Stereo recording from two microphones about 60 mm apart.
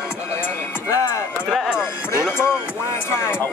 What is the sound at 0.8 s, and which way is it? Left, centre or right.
Music, left.